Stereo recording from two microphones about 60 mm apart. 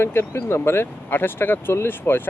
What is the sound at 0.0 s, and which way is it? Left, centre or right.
Speech, left.